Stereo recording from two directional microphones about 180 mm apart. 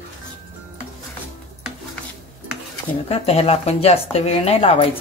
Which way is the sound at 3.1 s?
35° left (ahead or behind).